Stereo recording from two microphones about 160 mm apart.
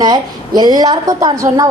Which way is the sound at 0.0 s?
25° right (ahead or behind).